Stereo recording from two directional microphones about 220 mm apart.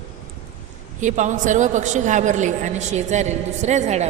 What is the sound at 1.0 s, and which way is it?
A woman's voice, 35° right (ahead or behind).